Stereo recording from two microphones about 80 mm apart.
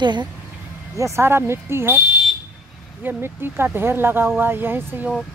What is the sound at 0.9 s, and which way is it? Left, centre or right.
Speech, right.